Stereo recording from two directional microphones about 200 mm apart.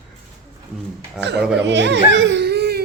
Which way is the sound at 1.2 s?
60° right (ahead or behind).